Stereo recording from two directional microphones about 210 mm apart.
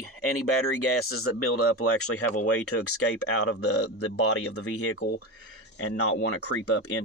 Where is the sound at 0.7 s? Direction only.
90° left.